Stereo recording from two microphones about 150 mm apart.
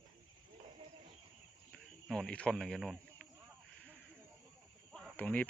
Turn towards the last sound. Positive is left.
turn(degrees=10)  # may be behind; listen again after turning